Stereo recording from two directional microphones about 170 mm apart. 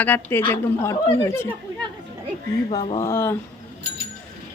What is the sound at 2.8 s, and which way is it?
Speech, 35° left (ahead or behind).